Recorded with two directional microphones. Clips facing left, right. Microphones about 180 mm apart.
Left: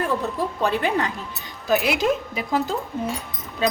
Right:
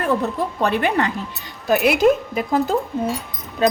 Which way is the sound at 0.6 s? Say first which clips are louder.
Right 3 dB; 65° right (ahead or behind).